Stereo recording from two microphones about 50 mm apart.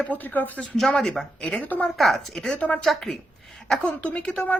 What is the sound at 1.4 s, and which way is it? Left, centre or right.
Speech, left.